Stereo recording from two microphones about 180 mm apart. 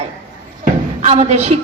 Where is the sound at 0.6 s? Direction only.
40° right (ahead or behind).